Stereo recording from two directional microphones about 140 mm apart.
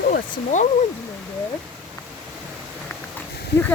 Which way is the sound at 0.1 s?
60° left (ahead or behind).